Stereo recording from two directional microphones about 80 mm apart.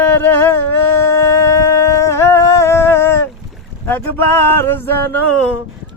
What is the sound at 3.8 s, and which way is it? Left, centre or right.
Music, left.